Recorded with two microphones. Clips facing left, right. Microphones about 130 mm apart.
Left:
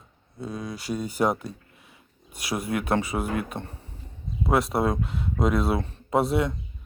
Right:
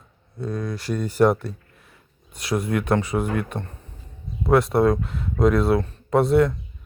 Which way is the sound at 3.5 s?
20° left (ahead or behind).